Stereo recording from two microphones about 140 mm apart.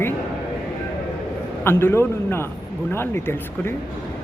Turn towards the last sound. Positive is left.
turn(degrees=15)  # may be behind; listen again after turning